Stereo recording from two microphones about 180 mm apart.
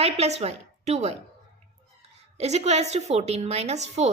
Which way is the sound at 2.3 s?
35° right (ahead or behind).